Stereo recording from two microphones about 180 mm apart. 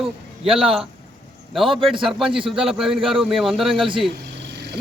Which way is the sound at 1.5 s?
Centre (ahead or behind).